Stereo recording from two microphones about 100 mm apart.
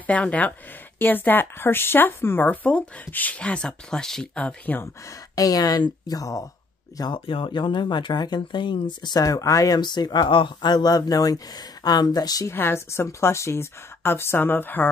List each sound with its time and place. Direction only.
0.0 s speech: 15° left (ahead or behind)
5.3 s speech: 35° left (ahead or behind)
7.0 s speech: 55° left (ahead or behind); by 12.4 s 40° left (ahead or behind)
12.4 s a woman's voice: 25° left (ahead or behind)